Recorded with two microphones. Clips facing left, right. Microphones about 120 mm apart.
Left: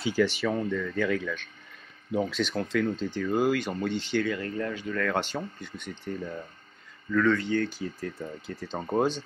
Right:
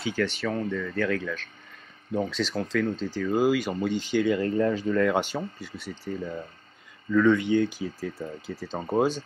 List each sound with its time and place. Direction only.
0.0 s speech: 5° left (ahead or behind); by 4.4 s 10° right (ahead or behind)
4.4 s speech: 25° right (ahead or behind)
5.0 s speech: 10° right (ahead or behind)